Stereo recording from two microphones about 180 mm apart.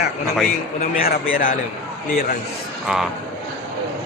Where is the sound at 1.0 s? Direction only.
50° left (ahead or behind).